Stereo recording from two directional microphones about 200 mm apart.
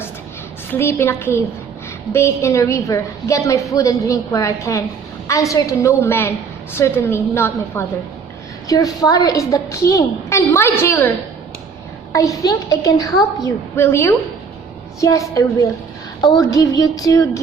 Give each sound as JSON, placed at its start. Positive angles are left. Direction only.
{"t": 0.7, "sound": "a woman's voice", "side_deg": 10}
{"t": 12.1, "sound": "a woman's voice", "side_deg": 15}